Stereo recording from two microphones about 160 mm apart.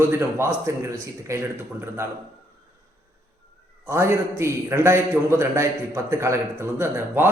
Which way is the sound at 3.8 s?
15° right (ahead or behind).